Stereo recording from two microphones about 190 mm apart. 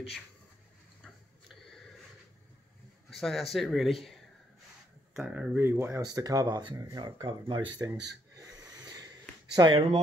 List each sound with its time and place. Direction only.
1.0 s a sound: centre (ahead or behind)
3.1 s speech: centre (ahead or behind); by 7.9 s 20° right (ahead or behind)
8.4 s snort: 20° right (ahead or behind)
9.5 s speech: 25° right (ahead or behind)